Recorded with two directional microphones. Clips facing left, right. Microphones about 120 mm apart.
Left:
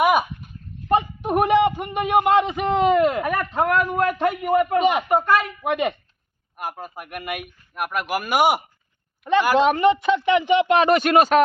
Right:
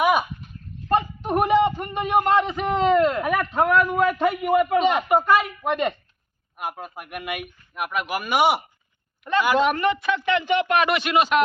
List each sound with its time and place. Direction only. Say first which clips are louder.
0.0 s a sound: left 2 dB; 5° left (ahead or behind)
0.9 s a man's voice: left 2 dB; 15° left (ahead or behind); by 4.8 s 5° right (ahead or behind)
4.8 s speech: left 1 dB; 10° left (ahead or behind)
5.0 s a man's voice: even; 5° right (ahead or behind)
5.6 s a man's voice: left 1 dB; 10° left (ahead or behind)
10.8 s speech: left 4 dB; 40° left (ahead or behind)